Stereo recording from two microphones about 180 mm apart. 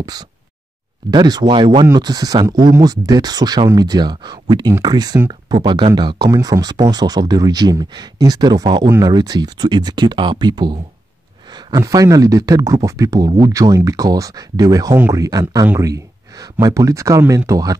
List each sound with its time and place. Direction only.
0.0 s speech: 20° right (ahead or behind)